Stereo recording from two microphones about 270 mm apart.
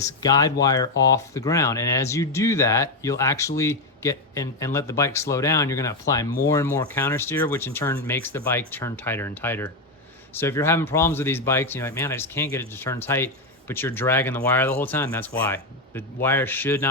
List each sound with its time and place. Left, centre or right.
0.0 s speech: centre